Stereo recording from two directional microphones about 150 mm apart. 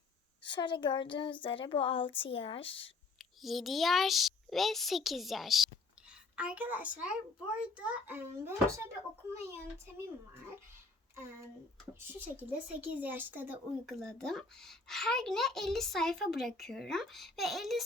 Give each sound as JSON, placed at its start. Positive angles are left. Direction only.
{"t": 0.4, "sound": "speech", "side_deg": 30}
{"t": 3.2, "sound": "a child's voice", "side_deg": 0}
{"t": 11.9, "sound": "speech", "side_deg": -10}
{"t": 14.0, "sound": "a child's voice", "side_deg": 5}